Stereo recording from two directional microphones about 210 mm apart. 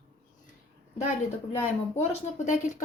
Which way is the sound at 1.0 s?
35° left (ahead or behind).